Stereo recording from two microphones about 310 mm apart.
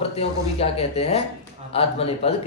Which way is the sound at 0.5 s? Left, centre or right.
Centre.